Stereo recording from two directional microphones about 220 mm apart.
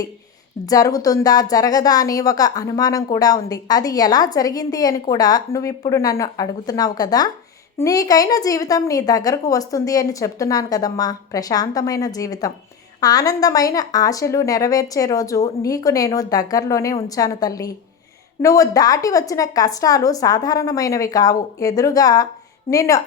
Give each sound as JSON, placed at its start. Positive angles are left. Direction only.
{"t": 0.6, "sound": "a woman's voice", "side_deg": 15}